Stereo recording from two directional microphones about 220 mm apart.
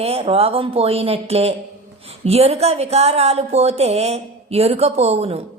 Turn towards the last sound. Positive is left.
turn(degrees=-25)  # may be behind; listen again after turning